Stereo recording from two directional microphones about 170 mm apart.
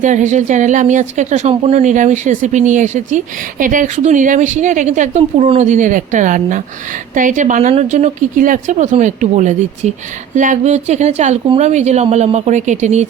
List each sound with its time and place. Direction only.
0.0 s speech: 45° right (ahead or behind)